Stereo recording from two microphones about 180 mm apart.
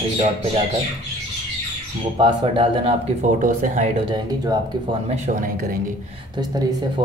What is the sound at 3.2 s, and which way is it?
Speech, 45° right (ahead or behind).